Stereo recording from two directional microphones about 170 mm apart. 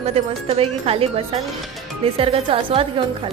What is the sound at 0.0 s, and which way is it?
A woman's voice, 35° right (ahead or behind).